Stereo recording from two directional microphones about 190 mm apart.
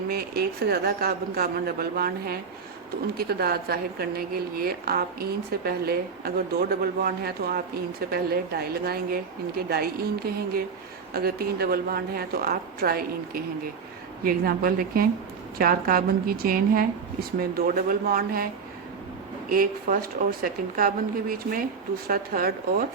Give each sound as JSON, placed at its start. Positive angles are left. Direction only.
{"t": 0.1, "sound": "a woman's voice", "side_deg": -55}
{"t": 19.5, "sound": "a woman's voice", "side_deg": -50}